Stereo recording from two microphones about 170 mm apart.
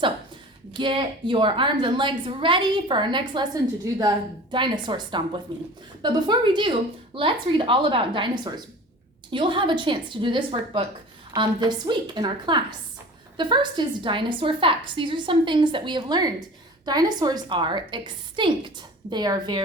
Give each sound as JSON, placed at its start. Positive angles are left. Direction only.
{"t": 0.7, "sound": "a woman's voice", "side_deg": -30}